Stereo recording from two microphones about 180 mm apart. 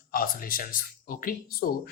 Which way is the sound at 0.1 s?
55° left (ahead or behind).